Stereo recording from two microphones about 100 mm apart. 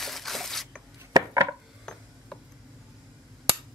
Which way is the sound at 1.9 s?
5° left (ahead or behind).